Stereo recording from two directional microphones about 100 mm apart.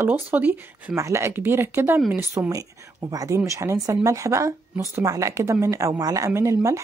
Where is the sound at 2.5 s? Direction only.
35° right (ahead or behind).